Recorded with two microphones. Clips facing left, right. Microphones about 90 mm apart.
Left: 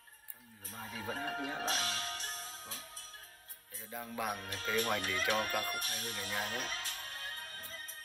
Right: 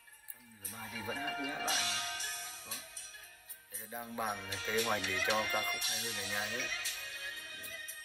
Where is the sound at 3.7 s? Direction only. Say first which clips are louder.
Even; 30° right (ahead or behind).